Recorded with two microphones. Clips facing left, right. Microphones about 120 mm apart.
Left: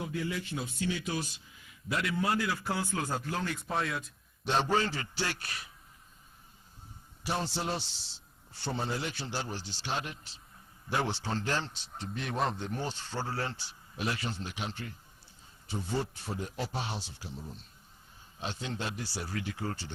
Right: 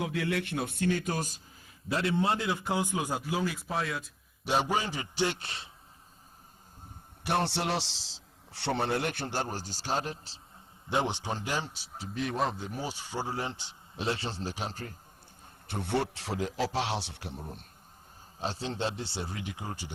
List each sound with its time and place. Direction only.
0.0 s speech: 80° right; by 5.7 s 25° right (ahead or behind)
7.3 s a man's voice: 65° right (ahead or behind); by 10.4 s 35° right (ahead or behind)
10.9 s speech: 20° right (ahead or behind); by 14.9 s 40° right (ahead or behind)
15.6 s a man's voice: 65° right (ahead or behind)
18.3 s speech: 35° right (ahead or behind); by 19.9 s 15° right (ahead or behind)